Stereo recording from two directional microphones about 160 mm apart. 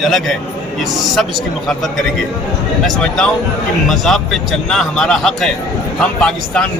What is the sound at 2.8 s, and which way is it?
A man's voice, 5° left (ahead or behind).